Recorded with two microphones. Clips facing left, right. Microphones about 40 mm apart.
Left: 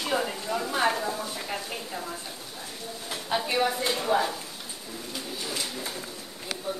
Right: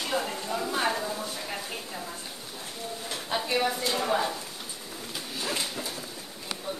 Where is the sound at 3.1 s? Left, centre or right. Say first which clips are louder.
Left 1 dB; centre.